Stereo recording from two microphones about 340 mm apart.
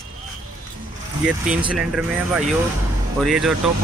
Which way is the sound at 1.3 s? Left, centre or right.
Centre.